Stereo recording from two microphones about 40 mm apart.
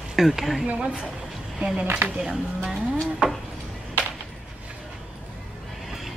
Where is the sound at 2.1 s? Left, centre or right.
Centre.